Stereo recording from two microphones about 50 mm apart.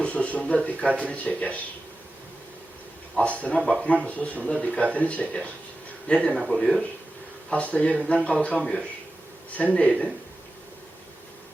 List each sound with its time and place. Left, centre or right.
0.0 s speech: left
3.2 s speech: left
3.7 s a man's voice: centre
4.0 s a man's voice: left
6.4 s speech: centre
7.5 s speech: left
8.5 s a man's voice: centre
9.6 s speech: left